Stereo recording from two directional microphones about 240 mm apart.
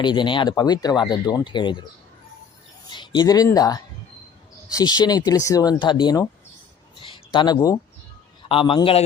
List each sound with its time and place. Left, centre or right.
0.0 s speech: centre
2.9 s speech: centre
7.0 s a sound: centre
8.4 s speech: left